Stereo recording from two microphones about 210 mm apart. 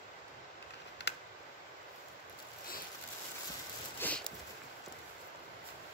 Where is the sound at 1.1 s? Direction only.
55° left (ahead or behind).